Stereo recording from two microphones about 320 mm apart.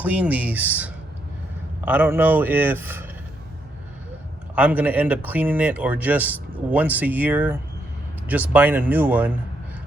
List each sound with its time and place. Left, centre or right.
0.0 s a man's voice: centre
4.5 s speech: centre